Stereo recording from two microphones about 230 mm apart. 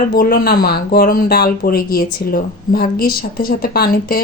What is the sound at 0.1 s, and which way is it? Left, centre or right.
Speech, left.